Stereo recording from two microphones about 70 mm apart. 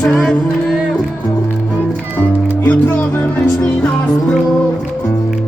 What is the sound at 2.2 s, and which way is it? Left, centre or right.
Music, left.